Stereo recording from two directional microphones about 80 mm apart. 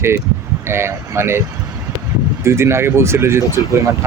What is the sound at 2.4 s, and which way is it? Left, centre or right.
Speech, right.